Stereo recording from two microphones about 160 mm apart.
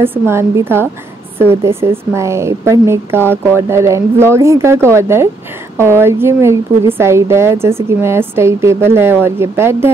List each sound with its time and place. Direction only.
0.0 s speech: 15° right (ahead or behind)